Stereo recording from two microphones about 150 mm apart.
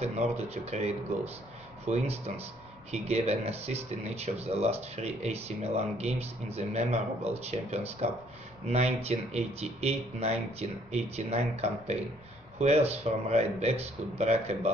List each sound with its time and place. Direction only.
0.0 s speech: 45° right (ahead or behind)